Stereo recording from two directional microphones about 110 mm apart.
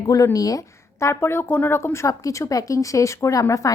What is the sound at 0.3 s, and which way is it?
Speech, 30° left (ahead or behind).